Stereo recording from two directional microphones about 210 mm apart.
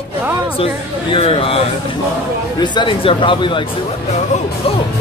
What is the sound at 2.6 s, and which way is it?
Speech, 20° left (ahead or behind).